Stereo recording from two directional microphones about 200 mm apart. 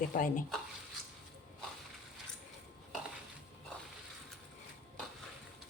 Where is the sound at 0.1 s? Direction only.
45° left (ahead or behind).